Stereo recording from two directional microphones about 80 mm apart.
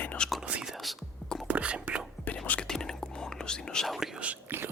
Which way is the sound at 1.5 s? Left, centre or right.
Centre.